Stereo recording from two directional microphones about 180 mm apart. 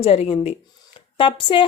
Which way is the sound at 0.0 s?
35° left (ahead or behind).